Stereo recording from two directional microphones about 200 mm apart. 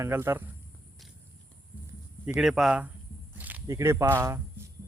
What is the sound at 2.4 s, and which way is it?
Speech, centre (ahead or behind).